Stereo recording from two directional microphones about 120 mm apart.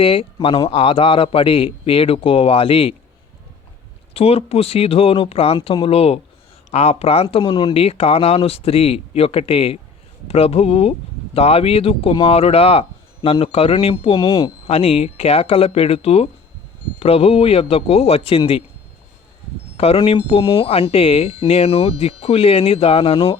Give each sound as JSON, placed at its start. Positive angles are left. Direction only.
{"t": 0.0, "sound": "speech", "side_deg": 50}
{"t": 4.1, "sound": "speech", "side_deg": 55}
{"t": 14.3, "sound": "speech", "side_deg": 35}
{"t": 14.7, "sound": "speech", "side_deg": 60}
{"t": 19.7, "sound": "speech", "side_deg": 55}